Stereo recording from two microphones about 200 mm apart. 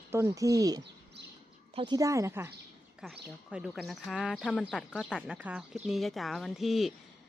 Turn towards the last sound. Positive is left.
turn(degrees=0)  # may be behind; listen again after turning